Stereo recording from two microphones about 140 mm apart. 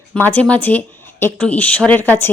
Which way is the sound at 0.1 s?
15° left (ahead or behind).